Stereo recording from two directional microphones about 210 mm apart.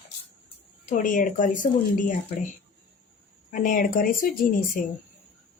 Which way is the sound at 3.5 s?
40° left (ahead or behind).